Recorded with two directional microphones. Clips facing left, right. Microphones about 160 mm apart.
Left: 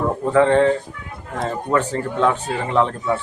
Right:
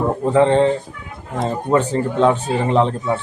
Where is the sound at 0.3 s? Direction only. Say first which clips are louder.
Even; 25° right (ahead or behind).